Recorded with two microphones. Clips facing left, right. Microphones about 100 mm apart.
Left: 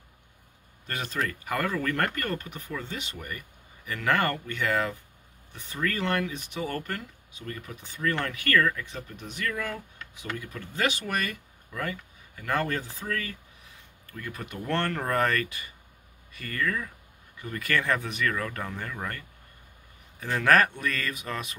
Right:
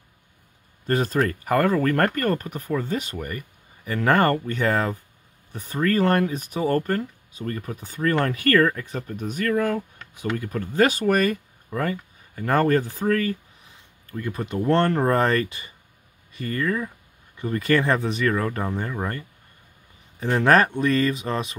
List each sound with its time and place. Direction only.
0.8 s speech: 40° right (ahead or behind)
14.1 s speech: 30° right (ahead or behind)